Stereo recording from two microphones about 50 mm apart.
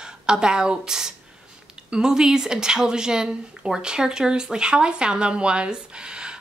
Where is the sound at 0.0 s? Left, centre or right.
Centre.